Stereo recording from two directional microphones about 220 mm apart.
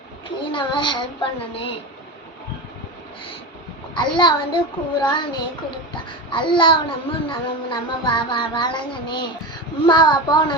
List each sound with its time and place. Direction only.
0.5 s a child's voice: 20° left (ahead or behind)
3.9 s a child's voice: 20° left (ahead or behind)